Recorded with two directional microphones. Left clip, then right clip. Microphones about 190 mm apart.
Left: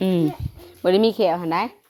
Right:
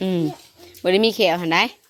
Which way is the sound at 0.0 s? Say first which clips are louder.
Left 2 dB; 15° left (ahead or behind).